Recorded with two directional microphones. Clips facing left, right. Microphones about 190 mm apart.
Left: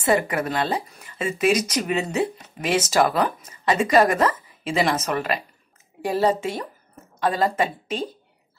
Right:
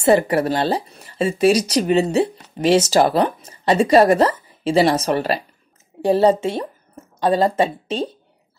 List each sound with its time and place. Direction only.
0.0 s a woman's voice: 30° right (ahead or behind)